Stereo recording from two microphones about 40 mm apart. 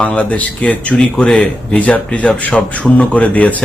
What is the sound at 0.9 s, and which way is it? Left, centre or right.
Speech, left.